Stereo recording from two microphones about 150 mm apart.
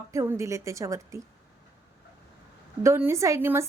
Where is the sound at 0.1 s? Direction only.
20° right (ahead or behind).